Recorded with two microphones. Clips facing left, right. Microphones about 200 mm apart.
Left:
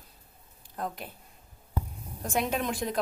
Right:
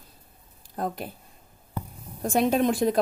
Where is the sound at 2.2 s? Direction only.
35° right (ahead or behind).